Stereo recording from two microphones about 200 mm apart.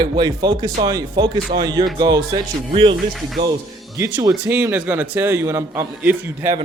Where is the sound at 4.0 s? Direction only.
15° right (ahead or behind).